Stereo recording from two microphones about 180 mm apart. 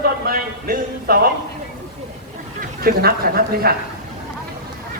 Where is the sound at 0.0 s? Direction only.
55° right (ahead or behind).